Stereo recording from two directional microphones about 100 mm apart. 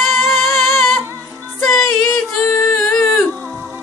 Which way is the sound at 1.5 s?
Centre (ahead or behind).